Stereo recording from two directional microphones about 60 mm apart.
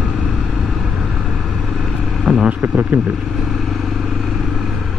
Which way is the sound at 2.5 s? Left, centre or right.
Right.